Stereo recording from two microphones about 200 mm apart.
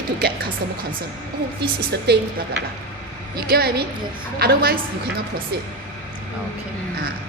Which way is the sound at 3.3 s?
50° right (ahead or behind).